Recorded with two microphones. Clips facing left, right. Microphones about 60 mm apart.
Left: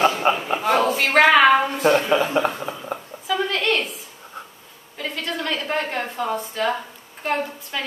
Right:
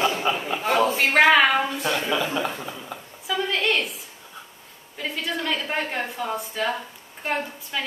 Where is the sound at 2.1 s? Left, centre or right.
Left.